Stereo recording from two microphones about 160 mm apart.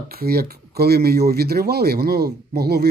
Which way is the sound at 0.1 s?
70° right (ahead or behind).